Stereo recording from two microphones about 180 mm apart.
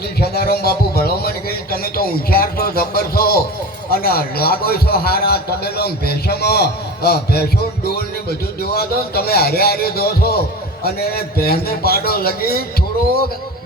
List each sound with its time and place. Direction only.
0.2 s a man's voice: 60° left (ahead or behind)